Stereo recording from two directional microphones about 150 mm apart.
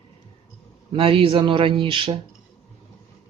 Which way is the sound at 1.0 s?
35° right (ahead or behind).